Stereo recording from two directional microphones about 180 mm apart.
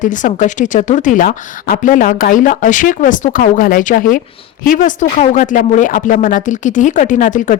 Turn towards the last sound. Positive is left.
turn(degrees=45)  # may be behind; listen again after turning